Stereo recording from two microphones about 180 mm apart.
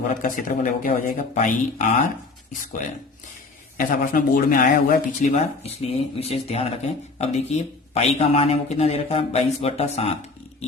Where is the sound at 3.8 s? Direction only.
50° left (ahead or behind).